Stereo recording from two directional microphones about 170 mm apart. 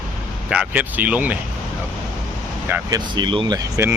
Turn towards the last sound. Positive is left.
turn(degrees=-20)  # may be behind; listen again after turning